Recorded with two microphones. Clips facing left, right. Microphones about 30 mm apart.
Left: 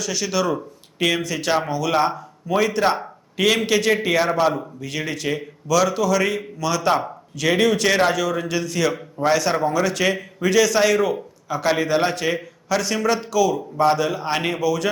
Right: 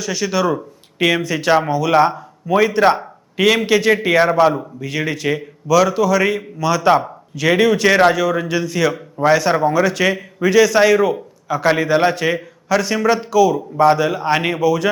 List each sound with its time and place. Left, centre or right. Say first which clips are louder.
0.0 s a man's voice: right 4 dB; centre